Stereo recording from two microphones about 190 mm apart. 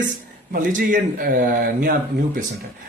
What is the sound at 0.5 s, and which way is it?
Speech, 45° right (ahead or behind).